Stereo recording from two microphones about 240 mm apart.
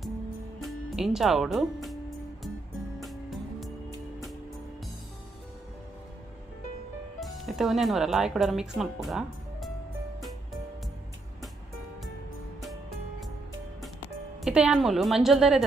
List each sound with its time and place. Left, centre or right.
0.6 s music: centre
7.2 s speech: centre
14.4 s a woman's voice: centre